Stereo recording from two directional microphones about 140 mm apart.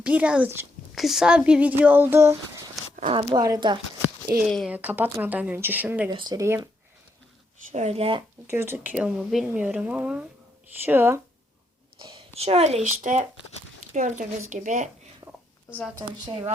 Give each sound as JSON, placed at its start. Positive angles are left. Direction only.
{"t": 0.0, "sound": "speech", "side_deg": -10}
{"t": 0.9, "sound": "speech", "side_deg": 0}
{"t": 3.1, "sound": "speech", "side_deg": -35}
{"t": 4.4, "sound": "speech", "side_deg": 5}
{"t": 4.7, "sound": "speech", "side_deg": -10}
{"t": 6.1, "sound": "speech", "side_deg": -30}
{"t": 7.7, "sound": "speech", "side_deg": -55}
{"t": 8.4, "sound": "speech", "side_deg": -15}
{"t": 12.0, "sound": "a woman's voice", "side_deg": -45}
{"t": 12.8, "sound": "speech", "side_deg": -65}
{"t": 15.2, "sound": "a sound", "side_deg": -30}